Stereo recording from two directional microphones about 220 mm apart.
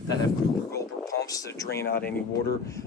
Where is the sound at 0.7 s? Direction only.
15° left (ahead or behind).